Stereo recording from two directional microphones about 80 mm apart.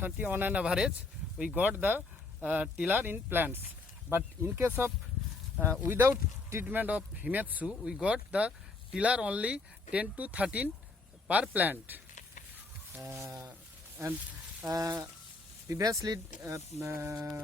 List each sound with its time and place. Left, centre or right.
0.0 s speech: right
0.6 s speech: centre
13.2 s a sound: right
14.6 s speech: right